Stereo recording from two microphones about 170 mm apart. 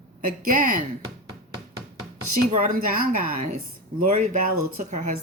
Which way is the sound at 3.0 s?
60° right (ahead or behind).